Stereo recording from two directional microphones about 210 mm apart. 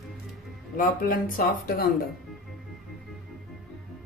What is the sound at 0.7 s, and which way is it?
A woman's voice, 40° left (ahead or behind).